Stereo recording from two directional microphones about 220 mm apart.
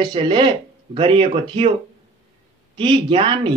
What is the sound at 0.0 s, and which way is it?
Speech, 20° right (ahead or behind).